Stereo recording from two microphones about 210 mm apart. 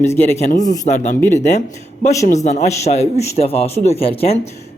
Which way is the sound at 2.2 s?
35° left (ahead or behind).